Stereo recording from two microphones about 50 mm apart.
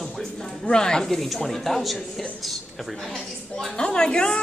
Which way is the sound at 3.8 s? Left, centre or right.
Centre.